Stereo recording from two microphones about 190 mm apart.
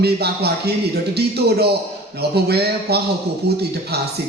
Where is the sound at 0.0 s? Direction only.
60° right (ahead or behind).